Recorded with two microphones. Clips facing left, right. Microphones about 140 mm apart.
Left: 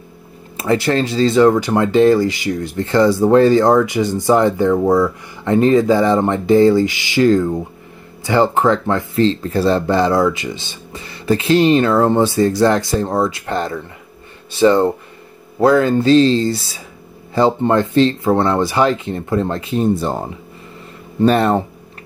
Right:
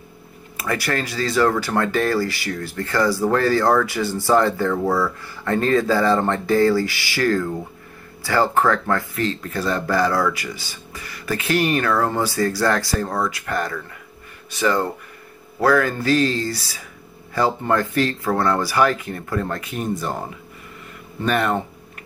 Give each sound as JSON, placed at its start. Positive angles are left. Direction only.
{"t": 0.6, "sound": "speech", "side_deg": 25}